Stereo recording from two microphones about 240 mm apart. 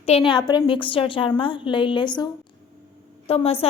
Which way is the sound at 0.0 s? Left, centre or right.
Left.